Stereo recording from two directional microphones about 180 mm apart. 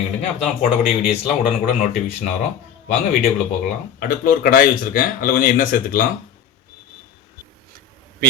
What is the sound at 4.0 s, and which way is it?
A man's voice, 50° left (ahead or behind).